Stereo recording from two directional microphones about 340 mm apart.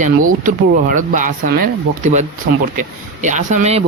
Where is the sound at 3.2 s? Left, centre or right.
Right.